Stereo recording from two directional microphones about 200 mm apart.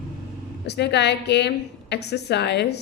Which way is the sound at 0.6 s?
55° left (ahead or behind).